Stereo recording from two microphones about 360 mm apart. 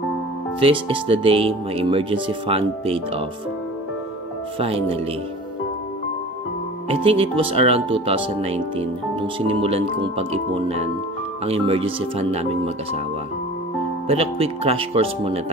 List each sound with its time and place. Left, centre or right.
0.6 s speech: centre
4.6 s speech: centre
6.9 s speech: centre
14.0 s speech: centre